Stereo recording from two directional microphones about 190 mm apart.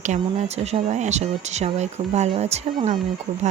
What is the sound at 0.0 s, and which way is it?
Speech, 35° right (ahead or behind).